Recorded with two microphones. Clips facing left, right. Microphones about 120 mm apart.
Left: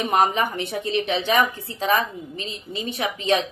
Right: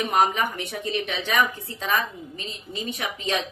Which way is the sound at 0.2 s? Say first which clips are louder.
Even; 35° left (ahead or behind).